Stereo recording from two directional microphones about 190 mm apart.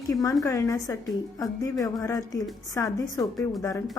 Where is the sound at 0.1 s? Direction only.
20° left (ahead or behind).